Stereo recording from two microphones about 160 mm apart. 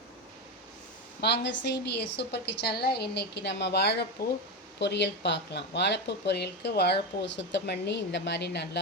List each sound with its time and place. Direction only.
1.2 s speech: 90° left